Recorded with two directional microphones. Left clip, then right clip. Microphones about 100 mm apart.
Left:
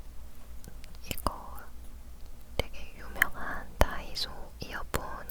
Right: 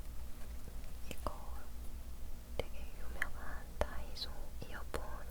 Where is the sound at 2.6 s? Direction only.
30° left (ahead or behind).